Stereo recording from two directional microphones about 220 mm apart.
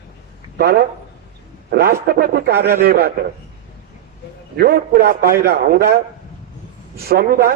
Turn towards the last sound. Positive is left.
turn(degrees=-40)  # may be behind; listen again after turning